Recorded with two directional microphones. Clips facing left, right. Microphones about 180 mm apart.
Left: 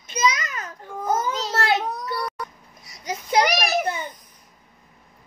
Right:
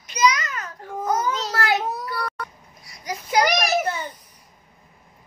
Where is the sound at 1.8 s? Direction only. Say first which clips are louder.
Right 1 dB; 5° right (ahead or behind).